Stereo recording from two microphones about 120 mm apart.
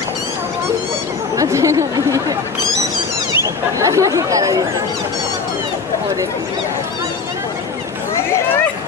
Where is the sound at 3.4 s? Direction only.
25° right (ahead or behind).